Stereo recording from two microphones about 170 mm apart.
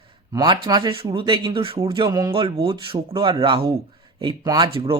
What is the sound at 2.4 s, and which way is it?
Speech, 30° right (ahead or behind).